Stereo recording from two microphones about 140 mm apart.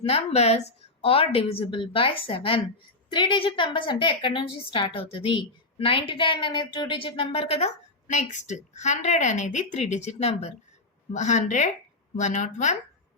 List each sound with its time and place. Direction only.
0.1 s a woman's voice: 50° left (ahead or behind)
8.0 s a woman's voice: 60° left (ahead or behind)